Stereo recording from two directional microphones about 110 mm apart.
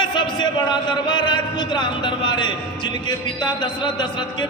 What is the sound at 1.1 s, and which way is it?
Speech, 45° left (ahead or behind).